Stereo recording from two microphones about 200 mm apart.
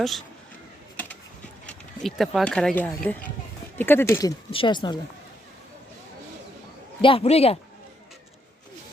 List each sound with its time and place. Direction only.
1.6 s speech: centre (ahead or behind); by 4.9 s 25° left (ahead or behind)
7.0 s a man's voice: 30° left (ahead or behind)